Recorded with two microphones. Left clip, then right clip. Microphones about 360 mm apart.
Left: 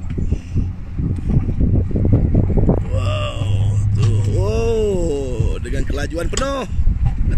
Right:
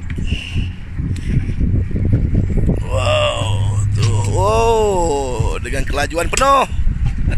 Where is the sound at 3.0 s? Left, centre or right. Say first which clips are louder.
Right 9 dB; centre.